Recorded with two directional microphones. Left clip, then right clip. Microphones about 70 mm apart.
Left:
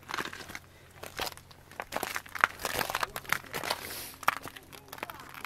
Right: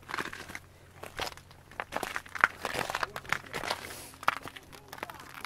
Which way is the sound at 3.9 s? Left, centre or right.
Left.